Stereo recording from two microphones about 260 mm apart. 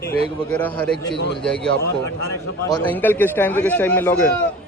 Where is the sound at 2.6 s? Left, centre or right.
Centre.